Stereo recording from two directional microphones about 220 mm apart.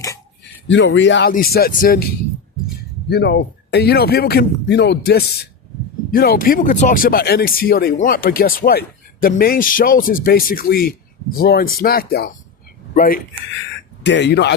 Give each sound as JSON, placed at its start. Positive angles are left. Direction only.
{"t": 0.7, "sound": "speech", "side_deg": 55}
{"t": 1.3, "sound": "speech", "side_deg": 40}
{"t": 3.1, "sound": "speech", "side_deg": 50}
{"t": 12.9, "sound": "a sound", "side_deg": 40}
{"t": 14.0, "sound": "speech", "side_deg": 50}